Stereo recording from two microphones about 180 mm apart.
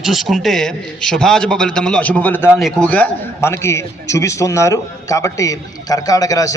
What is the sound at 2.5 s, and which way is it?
A man's voice, centre (ahead or behind).